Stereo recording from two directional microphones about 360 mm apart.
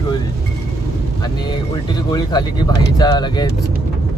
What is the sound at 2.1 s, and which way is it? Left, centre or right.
Speech, centre.